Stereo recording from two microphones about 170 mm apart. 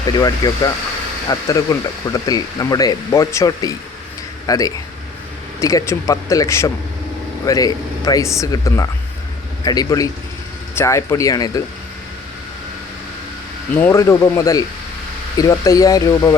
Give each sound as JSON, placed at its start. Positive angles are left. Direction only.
{"t": 0.2, "sound": "a man's voice", "side_deg": 25}
{"t": 13.8, "sound": "a man's voice", "side_deg": 15}